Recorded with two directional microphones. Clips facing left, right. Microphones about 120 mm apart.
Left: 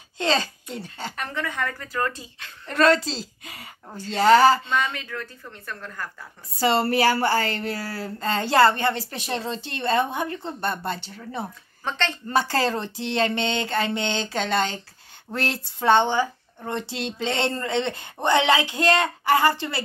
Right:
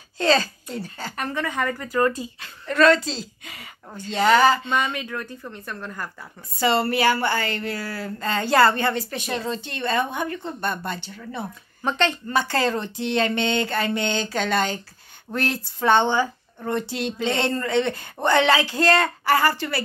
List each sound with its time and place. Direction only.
0.2 s speech: 25° left (ahead or behind)
1.1 s speech: 5° right (ahead or behind)
2.6 s speech: 35° left (ahead or behind)
4.9 s speech: 15° right (ahead or behind)
6.6 s speech: 35° left (ahead or behind); by 16.7 s 15° left (ahead or behind)
16.7 s speech: 25° left (ahead or behind)